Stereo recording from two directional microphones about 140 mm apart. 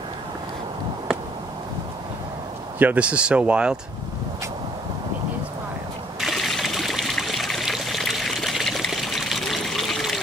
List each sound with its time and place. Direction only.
2.8 s speech: 10° right (ahead or behind)
6.2 s trickle: centre (ahead or behind)